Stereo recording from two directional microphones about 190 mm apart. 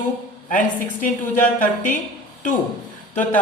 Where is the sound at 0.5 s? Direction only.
45° left (ahead or behind).